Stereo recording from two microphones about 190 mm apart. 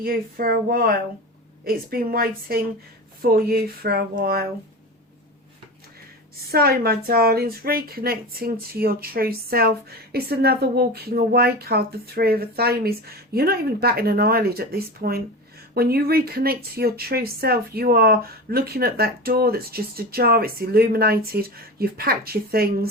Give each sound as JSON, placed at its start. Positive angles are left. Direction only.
{"t": 0.0, "sound": "a woman's voice", "side_deg": -50}
{"t": 6.5, "sound": "a woman's voice", "side_deg": -55}